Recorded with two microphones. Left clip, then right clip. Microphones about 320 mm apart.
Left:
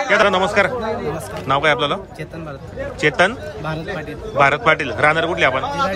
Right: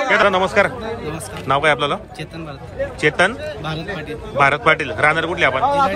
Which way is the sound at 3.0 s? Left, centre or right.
Centre.